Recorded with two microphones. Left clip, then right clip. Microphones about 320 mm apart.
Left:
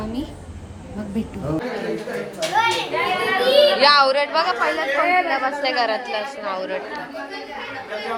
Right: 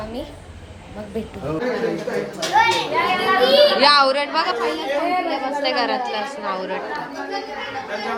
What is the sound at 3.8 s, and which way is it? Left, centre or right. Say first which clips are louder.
A woman's voice: even; centre.